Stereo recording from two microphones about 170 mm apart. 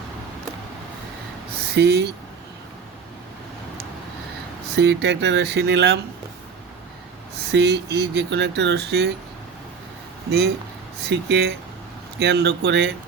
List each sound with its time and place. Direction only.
1.5 s speech: 75° right (ahead or behind)
4.7 s speech: 85° right
7.5 s speech: 80° right
10.2 s speech: 70° right (ahead or behind)